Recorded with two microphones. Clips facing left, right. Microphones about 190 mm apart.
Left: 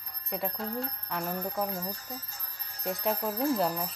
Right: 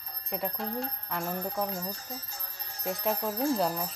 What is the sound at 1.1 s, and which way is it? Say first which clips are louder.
Speech: left 1 dB; centre (ahead or behind).